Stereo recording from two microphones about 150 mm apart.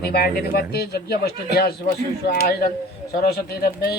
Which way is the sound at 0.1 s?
90° left.